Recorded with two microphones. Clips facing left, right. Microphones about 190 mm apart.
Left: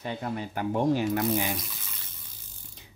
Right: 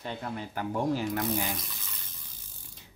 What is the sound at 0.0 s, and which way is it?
Speech, 15° left (ahead or behind).